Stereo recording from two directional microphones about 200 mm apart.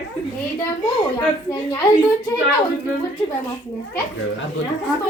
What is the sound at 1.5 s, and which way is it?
Speech, 10° left (ahead or behind).